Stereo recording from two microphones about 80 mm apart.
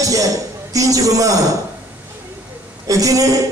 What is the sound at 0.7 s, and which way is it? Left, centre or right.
Speech, right.